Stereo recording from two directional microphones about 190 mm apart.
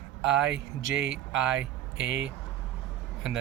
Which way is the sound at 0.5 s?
75° right (ahead or behind).